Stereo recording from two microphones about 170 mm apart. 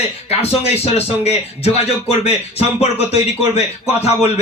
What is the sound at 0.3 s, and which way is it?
Speech, 35° left (ahead or behind).